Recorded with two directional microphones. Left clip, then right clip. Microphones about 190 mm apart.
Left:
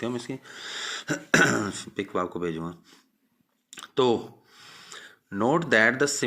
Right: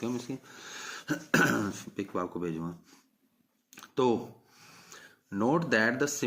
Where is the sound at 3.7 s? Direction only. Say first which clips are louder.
Left 5 dB; 25° left (ahead or behind).